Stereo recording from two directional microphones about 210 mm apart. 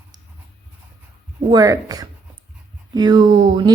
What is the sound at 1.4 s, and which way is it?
Speech, 15° right (ahead or behind).